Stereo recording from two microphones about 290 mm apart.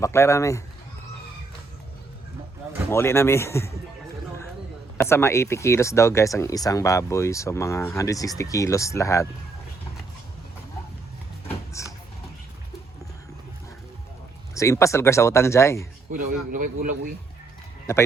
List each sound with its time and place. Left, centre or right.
0.0 s speech: centre
2.9 s speech: centre
4.9 s speech: centre
11.4 s a sound: centre
14.5 s speech: centre
16.1 s speech: right